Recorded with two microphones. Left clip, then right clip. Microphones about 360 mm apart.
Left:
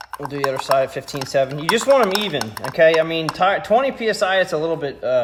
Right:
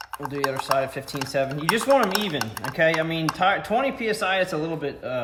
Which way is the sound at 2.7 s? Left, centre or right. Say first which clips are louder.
Left 7 dB; centre.